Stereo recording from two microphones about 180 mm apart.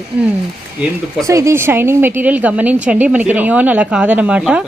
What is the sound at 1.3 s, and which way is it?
Speech, 15° right (ahead or behind).